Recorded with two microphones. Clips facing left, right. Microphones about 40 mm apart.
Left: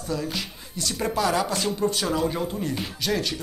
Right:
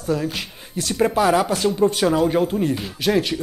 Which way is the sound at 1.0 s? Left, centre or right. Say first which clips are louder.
Right 7 dB; right.